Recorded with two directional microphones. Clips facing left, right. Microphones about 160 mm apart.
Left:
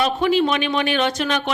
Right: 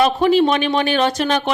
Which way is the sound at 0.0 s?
40° right (ahead or behind).